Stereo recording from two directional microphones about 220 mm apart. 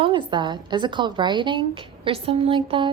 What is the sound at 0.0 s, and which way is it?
A woman's voice, 20° right (ahead or behind).